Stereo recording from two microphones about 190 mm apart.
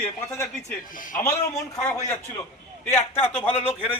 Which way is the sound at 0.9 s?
45° left (ahead or behind).